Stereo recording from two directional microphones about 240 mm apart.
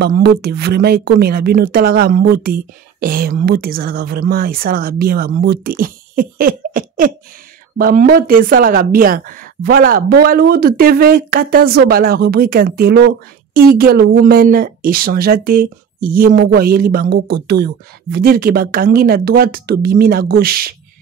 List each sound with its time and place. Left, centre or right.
0.0 s speech: right